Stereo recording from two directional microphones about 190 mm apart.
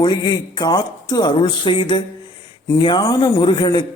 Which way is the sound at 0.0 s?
20° left (ahead or behind).